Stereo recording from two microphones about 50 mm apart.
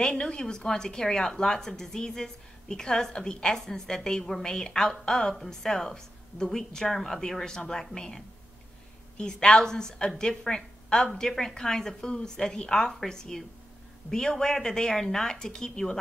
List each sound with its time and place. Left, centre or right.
0.0 s a woman's voice: centre